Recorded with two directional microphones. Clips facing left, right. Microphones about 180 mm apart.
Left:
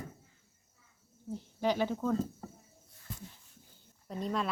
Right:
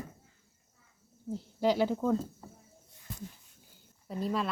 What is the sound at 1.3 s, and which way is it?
Speech, 10° right (ahead or behind).